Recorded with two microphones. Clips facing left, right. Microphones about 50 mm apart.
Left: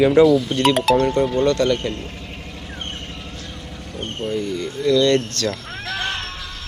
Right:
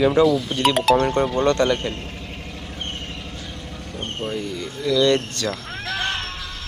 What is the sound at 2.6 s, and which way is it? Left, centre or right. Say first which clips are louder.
Vehicle: even; centre.